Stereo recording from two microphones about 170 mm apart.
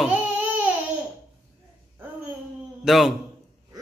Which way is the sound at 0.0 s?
10° right (ahead or behind).